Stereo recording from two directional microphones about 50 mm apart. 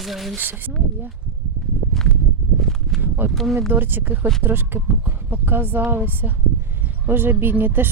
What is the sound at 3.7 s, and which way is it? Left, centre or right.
Speech, right.